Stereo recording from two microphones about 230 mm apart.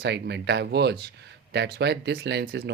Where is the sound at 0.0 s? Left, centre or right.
Right.